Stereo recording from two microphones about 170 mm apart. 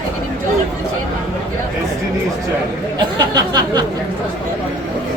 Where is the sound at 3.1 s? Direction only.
25° right (ahead or behind).